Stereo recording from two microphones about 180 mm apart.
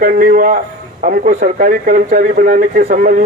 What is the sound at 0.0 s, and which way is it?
Speech, 55° right (ahead or behind).